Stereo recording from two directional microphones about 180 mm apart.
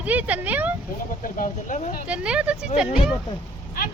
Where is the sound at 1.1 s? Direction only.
45° left (ahead or behind).